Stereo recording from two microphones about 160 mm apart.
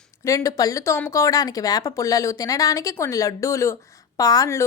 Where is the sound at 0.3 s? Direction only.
20° left (ahead or behind).